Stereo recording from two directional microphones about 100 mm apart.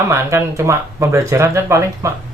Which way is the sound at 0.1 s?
25° right (ahead or behind).